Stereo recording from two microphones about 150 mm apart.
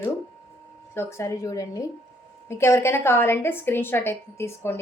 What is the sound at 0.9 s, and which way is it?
A woman's voice, 20° left (ahead or behind).